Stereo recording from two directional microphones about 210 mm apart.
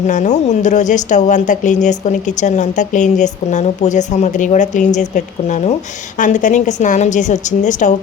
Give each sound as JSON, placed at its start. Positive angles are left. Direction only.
{"t": 0.1, "sound": "a woman's voice", "side_deg": 35}